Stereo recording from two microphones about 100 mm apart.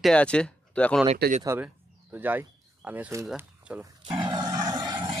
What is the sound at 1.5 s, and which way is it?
Speech, 25° right (ahead or behind).